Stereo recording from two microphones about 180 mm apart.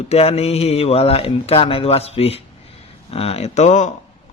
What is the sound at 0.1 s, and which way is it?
A man's voice, 35° left (ahead or behind).